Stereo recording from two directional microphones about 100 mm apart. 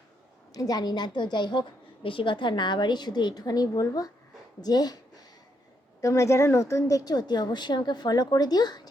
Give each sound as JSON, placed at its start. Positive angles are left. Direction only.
{"t": 0.5, "sound": "a woman's voice", "side_deg": 40}
{"t": 6.0, "sound": "a woman's voice", "side_deg": 30}